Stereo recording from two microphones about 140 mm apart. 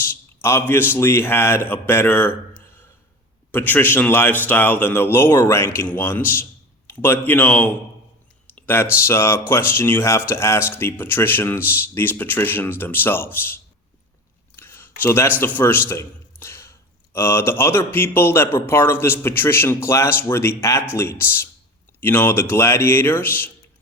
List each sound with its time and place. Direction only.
0.4 s a man's voice: 15° left (ahead or behind)
3.5 s a man's voice: 15° left (ahead or behind)
14.5 s a sound: 15° left (ahead or behind)
15.4 s a man's voice: 15° left (ahead or behind)